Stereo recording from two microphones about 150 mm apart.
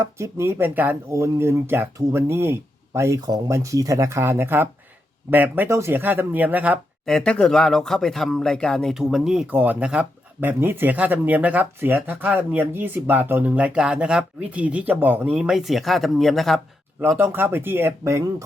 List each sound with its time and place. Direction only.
0.0 s speech: 20° right (ahead or behind)
7.0 s speech: centre (ahead or behind)
17.0 s speech: 15° right (ahead or behind)